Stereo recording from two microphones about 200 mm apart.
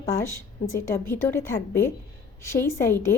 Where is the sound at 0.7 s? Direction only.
10° left (ahead or behind).